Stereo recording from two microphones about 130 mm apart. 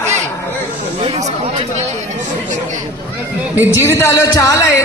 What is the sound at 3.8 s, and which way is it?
A man's voice, 20° left (ahead or behind).